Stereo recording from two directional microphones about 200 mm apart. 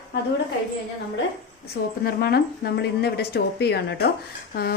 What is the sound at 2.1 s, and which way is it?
A woman's voice, 50° left (ahead or behind).